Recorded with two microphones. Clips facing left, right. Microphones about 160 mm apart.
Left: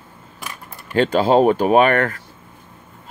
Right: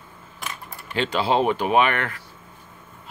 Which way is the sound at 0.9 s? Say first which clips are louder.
Left 7 dB; 45° left (ahead or behind).